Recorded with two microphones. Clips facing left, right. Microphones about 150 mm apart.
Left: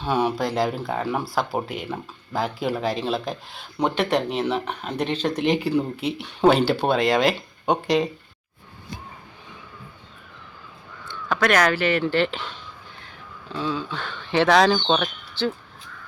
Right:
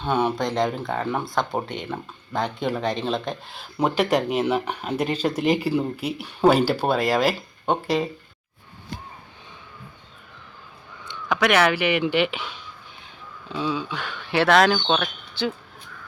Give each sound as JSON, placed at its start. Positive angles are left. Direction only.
{"t": 0.0, "sound": "speech", "side_deg": 0}
{"t": 11.0, "sound": "caw", "side_deg": -20}
{"t": 11.3, "sound": "speech", "side_deg": -10}